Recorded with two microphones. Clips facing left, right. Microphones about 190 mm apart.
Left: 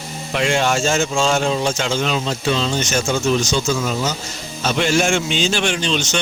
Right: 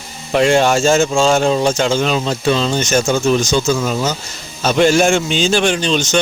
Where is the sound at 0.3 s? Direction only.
40° right (ahead or behind).